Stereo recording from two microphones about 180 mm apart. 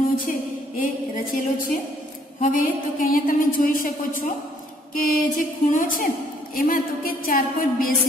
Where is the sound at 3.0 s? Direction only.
50° left (ahead or behind).